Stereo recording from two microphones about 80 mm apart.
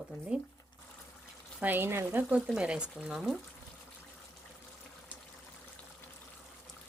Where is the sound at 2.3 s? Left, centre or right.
Centre.